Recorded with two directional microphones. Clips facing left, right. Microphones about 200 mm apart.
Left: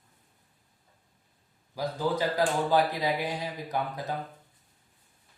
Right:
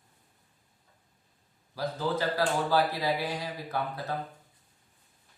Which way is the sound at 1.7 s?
15° left (ahead or behind).